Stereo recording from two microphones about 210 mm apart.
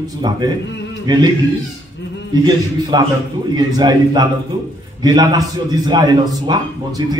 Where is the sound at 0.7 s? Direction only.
60° left (ahead or behind).